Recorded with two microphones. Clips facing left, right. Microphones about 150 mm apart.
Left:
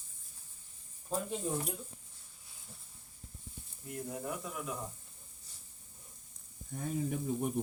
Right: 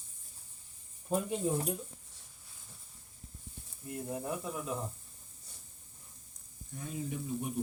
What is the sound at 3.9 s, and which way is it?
Speech, 20° right (ahead or behind).